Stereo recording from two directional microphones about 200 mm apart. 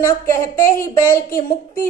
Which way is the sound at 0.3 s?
15° left (ahead or behind).